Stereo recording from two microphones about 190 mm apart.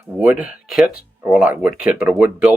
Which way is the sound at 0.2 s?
5° right (ahead or behind).